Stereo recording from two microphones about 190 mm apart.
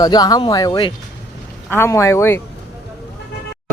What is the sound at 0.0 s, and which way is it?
A man's voice, 20° left (ahead or behind).